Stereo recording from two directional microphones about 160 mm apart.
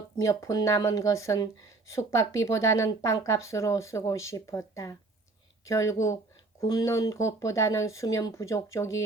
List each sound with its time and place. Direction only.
0.2 s speech: 20° left (ahead or behind)